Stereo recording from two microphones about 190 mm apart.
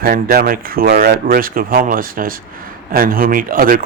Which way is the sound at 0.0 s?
50° right (ahead or behind).